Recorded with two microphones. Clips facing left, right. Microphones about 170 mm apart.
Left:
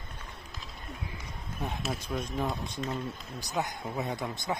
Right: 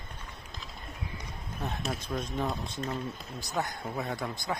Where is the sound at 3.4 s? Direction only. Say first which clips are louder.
Even; 15° left (ahead or behind).